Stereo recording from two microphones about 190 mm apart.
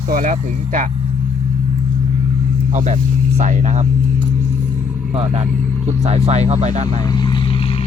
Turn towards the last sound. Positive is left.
turn(degrees=25)  # may be behind; listen again after turning